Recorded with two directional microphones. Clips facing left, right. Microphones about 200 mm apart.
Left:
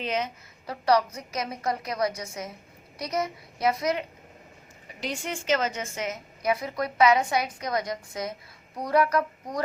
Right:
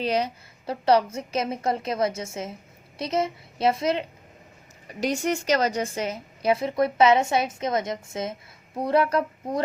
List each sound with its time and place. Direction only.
0.0 s a woman's voice: 35° right (ahead or behind)
4.9 s a woman's voice: 40° right (ahead or behind)